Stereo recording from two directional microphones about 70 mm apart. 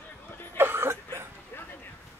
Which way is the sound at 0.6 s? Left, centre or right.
Right.